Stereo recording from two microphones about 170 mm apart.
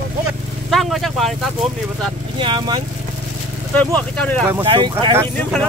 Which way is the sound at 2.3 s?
30° right (ahead or behind).